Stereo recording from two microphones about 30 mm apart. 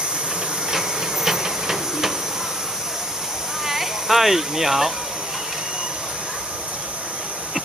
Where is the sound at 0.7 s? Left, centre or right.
Centre.